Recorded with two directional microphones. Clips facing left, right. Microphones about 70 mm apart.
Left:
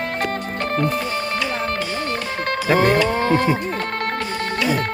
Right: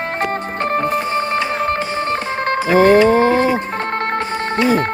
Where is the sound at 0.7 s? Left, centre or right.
Right.